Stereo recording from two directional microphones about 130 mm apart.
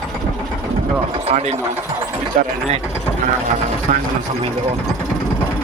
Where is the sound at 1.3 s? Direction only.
70° right (ahead or behind).